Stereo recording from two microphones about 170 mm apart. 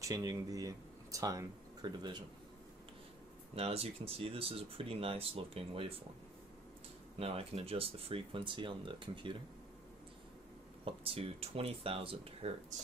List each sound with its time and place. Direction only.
0.0 s speech: 20° right (ahead or behind)
3.5 s speech: 35° right (ahead or behind)
7.2 s speech: 35° right (ahead or behind)
10.9 s speech: 35° right (ahead or behind)